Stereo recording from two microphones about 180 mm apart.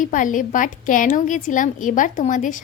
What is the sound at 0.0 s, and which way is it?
A woman's voice, 45° left (ahead or behind).